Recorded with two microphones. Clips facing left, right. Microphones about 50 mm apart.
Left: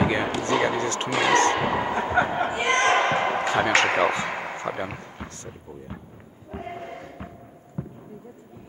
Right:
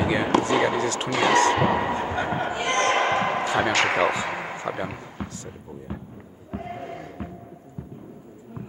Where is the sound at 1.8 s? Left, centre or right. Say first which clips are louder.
Even; left.